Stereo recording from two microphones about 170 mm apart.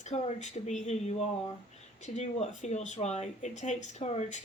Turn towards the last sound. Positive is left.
turn(degrees=40)  # may be behind; listen again after turning